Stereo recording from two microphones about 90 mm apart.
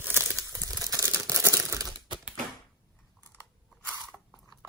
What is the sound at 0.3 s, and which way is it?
Crumpling, 35° right (ahead or behind).